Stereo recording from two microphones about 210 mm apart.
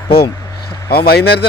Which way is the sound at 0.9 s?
45° left (ahead or behind).